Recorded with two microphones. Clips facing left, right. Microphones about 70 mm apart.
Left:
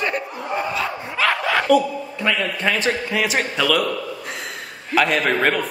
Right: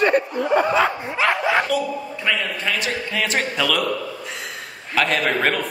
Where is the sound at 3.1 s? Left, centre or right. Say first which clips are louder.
Left 1 dB; centre.